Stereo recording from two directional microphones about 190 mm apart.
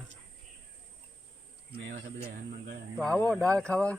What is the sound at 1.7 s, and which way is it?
Speech, 60° right (ahead or behind).